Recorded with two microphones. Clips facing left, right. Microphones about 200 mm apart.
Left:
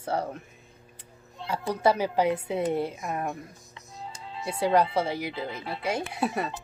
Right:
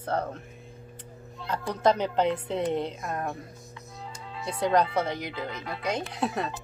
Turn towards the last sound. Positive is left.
turn(degrees=5)  # may be behind; listen again after turning